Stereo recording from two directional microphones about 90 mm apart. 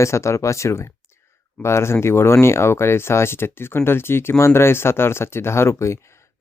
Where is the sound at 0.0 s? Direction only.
30° left (ahead or behind).